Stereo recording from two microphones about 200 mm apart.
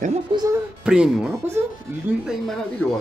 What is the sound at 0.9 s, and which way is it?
Speech, 5° right (ahead or behind).